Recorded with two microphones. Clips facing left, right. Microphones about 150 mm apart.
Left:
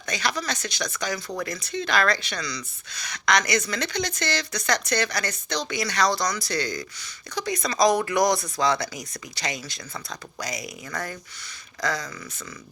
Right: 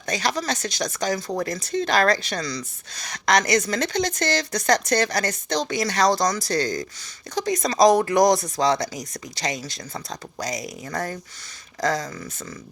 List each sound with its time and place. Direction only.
0.0 s speech: 40° right (ahead or behind)